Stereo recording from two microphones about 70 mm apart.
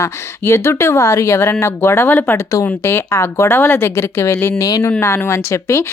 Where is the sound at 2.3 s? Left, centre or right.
Left.